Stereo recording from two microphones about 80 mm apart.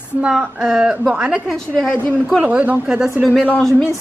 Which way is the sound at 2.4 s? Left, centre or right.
Centre.